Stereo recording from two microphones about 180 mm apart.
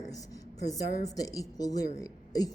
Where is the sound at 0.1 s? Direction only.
20° left (ahead or behind).